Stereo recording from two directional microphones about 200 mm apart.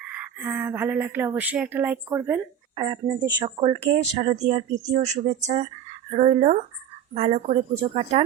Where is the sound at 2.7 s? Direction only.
20° right (ahead or behind).